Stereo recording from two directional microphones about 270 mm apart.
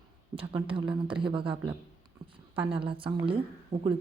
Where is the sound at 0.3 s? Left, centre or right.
Centre.